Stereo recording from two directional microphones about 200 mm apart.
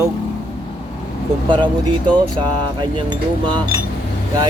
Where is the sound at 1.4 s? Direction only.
25° right (ahead or behind).